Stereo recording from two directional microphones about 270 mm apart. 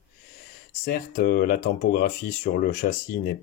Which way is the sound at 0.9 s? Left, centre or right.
Left.